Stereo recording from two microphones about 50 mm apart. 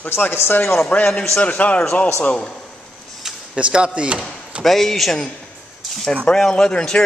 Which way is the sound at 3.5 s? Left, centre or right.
Right.